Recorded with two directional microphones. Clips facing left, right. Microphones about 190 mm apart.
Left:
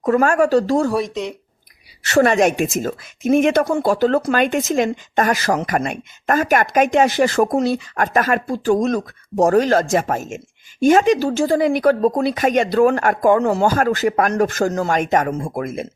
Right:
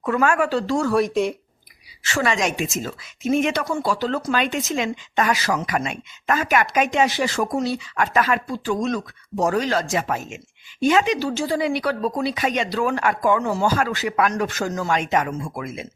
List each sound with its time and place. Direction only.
0.0 s speech: 40° left (ahead or behind)
2.1 s speech: 50° left (ahead or behind)